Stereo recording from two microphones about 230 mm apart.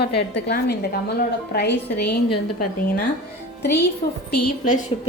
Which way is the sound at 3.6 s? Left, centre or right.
Left.